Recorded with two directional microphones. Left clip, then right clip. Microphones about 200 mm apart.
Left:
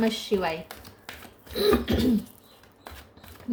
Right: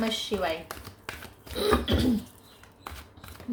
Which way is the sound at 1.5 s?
35° left (ahead or behind).